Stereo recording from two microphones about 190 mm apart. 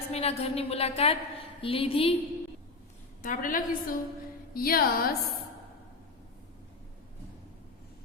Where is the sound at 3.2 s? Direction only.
45° left (ahead or behind).